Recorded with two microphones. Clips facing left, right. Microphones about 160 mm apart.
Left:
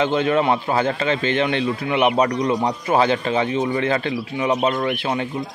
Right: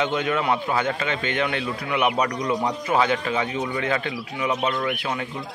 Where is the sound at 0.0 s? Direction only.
30° left (ahead or behind).